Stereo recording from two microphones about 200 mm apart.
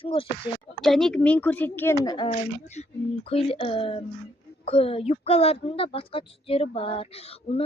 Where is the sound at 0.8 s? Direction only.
Centre (ahead or behind).